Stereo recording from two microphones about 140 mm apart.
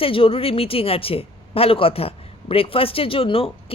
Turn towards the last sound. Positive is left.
turn(degrees=40)  # may be behind; listen again after turning